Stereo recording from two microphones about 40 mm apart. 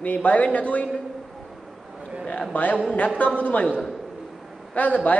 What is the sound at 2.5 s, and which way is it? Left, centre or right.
A man's voice, left.